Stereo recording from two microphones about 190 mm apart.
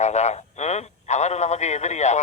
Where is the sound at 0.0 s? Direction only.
40° left (ahead or behind).